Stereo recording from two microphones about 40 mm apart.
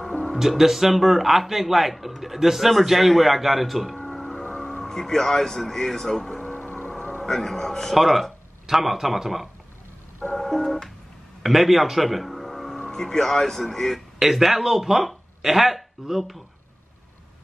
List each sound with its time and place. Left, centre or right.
0.4 s speech: centre
3.9 s music: centre
6.7 s vehicle: left
7.2 s speech: centre
7.9 s speech: centre
10.3 s music: centre
11.4 s speech: centre
12.8 s speech: centre
13.9 s speech: centre